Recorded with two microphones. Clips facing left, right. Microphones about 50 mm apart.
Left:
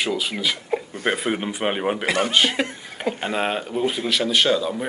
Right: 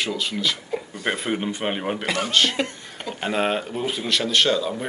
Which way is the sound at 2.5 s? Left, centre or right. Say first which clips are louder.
Left 1 dB; centre.